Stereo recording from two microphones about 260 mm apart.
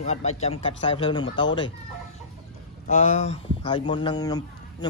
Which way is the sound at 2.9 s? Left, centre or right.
Left.